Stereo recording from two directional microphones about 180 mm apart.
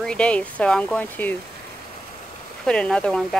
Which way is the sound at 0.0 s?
5° left (ahead or behind).